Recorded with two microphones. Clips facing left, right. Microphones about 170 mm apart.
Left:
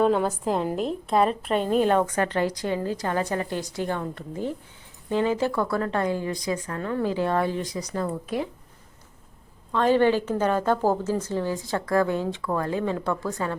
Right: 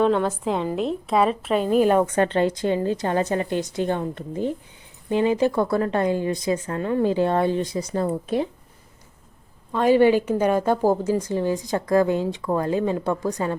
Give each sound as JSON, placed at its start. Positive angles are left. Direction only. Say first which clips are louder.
{"t": 0.0, "sound": "a woman's voice", "louder": "right 1 dB", "side_deg": 5}
{"t": 2.1, "sound": "speech", "louder": "right 4 dB", "side_deg": -25}
{"t": 9.7, "sound": "a woman's voice", "louder": "right 3 dB", "side_deg": -10}